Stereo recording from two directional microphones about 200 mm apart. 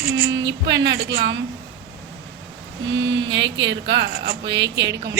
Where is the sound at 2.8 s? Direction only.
65° right (ahead or behind).